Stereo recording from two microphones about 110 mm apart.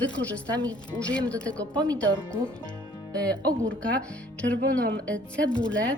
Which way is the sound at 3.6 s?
10° left (ahead or behind).